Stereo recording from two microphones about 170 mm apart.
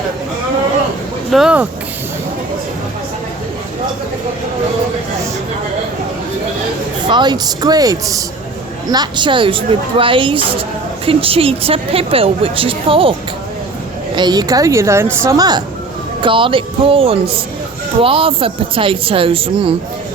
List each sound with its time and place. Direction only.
1.3 s speech: 5° right (ahead or behind)
7.1 s a woman's voice: 25° right (ahead or behind)
14.2 s a woman's voice: 25° right (ahead or behind)